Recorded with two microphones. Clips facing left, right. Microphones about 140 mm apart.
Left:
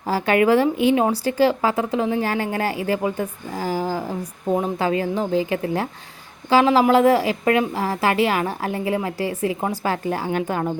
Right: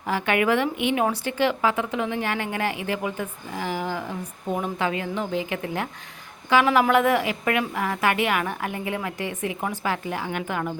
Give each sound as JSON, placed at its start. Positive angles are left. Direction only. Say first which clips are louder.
{"t": 0.0, "sound": "a woman's voice", "louder": "left 5 dB", "side_deg": 35}